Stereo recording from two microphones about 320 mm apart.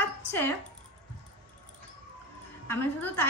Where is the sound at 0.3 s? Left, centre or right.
Centre.